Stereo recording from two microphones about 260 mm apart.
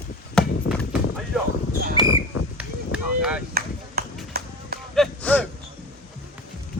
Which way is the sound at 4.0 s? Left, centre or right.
Right.